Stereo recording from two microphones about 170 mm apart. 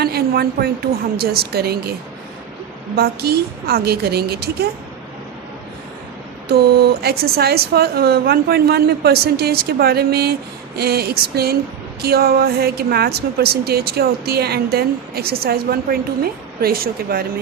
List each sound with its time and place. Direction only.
0.0 s a sound: 65° right (ahead or behind)
1.2 s speech: 65° right (ahead or behind)
2.9 s speech: 70° right (ahead or behind)
7.0 s speech: 65° right (ahead or behind)